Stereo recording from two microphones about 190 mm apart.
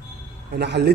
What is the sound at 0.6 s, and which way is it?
Speech, 60° right (ahead or behind).